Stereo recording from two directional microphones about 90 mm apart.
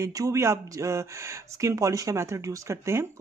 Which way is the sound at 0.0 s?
35° right (ahead or behind).